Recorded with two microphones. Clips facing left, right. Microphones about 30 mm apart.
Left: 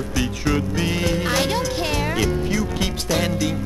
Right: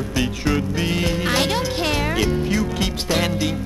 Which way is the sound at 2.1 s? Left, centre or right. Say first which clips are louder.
Right 1 dB; centre.